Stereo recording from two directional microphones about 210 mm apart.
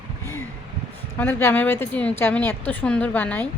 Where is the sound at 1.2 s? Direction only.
10° left (ahead or behind).